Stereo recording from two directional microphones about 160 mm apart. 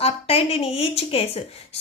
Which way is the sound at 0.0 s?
35° left (ahead or behind).